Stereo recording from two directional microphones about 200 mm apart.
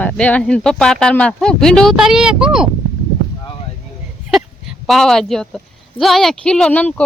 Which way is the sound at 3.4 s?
25° left (ahead or behind).